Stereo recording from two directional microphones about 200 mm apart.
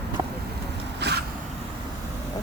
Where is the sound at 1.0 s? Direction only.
55° right (ahead or behind).